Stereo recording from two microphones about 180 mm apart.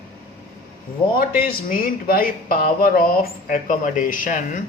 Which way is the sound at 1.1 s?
55° left (ahead or behind).